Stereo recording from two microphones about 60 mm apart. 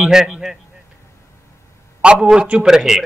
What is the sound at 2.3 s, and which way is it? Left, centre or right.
Speech, centre.